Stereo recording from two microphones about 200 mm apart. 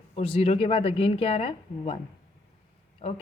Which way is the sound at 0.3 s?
30° left (ahead or behind).